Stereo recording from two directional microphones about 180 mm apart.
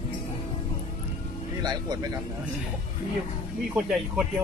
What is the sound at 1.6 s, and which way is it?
Speech, 20° right (ahead or behind).